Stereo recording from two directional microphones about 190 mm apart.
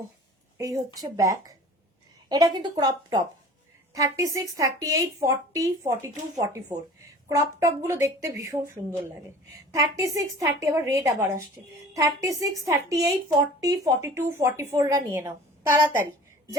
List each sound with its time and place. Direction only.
0.9 s a woman's voice: 20° right (ahead or behind)